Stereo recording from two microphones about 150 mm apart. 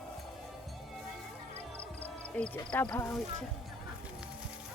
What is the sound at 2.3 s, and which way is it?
Speech, 5° left (ahead or behind).